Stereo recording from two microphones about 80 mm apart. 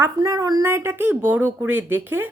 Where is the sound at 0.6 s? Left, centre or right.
Right.